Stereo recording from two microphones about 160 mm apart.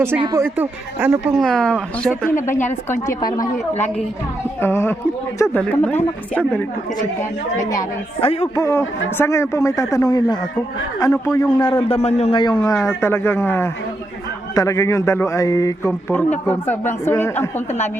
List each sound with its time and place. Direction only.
0.2 s speech: 20° right (ahead or behind)
0.5 s speech: 10° right (ahead or behind)
1.4 s speech: 5° left (ahead or behind)
3.1 s a man's voice: 25° left (ahead or behind)
4.6 s a woman's voice: 15° left (ahead or behind)
8.2 s a man's voice: 40° left (ahead or behind)
8.5 s a man's voice: 15° left (ahead or behind)
11.6 s a man's voice: 35° left (ahead or behind)
12.4 s a man's voice: 25° left (ahead or behind)
13.0 s a woman's voice: 15° left (ahead or behind)